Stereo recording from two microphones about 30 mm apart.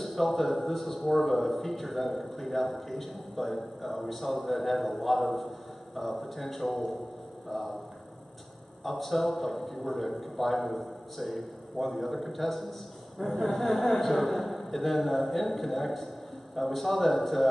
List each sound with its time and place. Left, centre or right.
0.0 s a man's voice: centre
8.8 s a man's voice: centre